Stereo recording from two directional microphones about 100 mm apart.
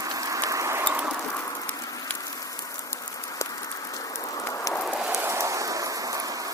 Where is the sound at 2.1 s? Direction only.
35° left (ahead or behind).